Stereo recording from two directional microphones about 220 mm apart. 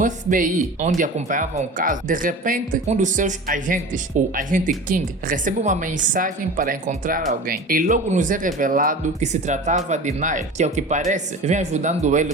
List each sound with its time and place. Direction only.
0.0 s a woman's voice: 35° right (ahead or behind)